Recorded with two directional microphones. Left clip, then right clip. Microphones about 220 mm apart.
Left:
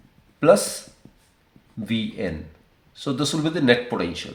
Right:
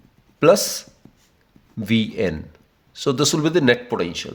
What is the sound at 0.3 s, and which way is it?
Speech, 50° right (ahead or behind).